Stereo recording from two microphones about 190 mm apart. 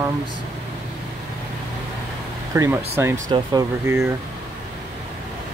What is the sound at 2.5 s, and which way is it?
Speech, 15° right (ahead or behind).